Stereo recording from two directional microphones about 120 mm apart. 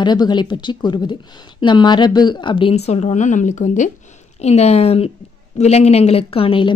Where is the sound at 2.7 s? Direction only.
65° left (ahead or behind); by 3.9 s 90° left.